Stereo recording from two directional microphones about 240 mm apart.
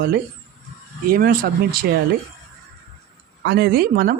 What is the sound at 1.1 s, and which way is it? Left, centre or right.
Speech, right.